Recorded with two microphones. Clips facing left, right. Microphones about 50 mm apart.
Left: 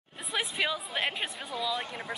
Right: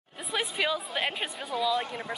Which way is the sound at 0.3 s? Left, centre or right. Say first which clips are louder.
Right 2 dB; centre.